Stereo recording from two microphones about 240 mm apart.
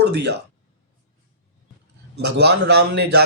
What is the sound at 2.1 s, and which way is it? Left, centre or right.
Speech, right.